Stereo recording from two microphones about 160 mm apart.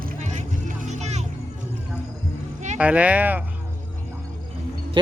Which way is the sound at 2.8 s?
10° right (ahead or behind).